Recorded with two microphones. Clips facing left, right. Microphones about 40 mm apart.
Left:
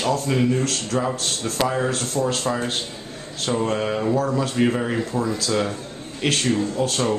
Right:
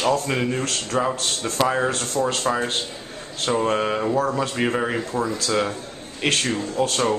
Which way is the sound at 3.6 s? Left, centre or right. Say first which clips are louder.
Right 1 dB; centre.